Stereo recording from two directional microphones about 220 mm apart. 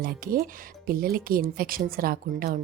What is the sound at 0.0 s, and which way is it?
A woman's voice, 40° right (ahead or behind).